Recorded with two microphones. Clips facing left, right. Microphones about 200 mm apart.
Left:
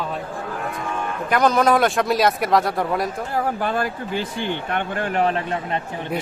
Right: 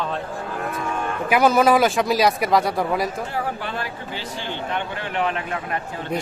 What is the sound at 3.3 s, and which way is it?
Speech, 45° left (ahead or behind).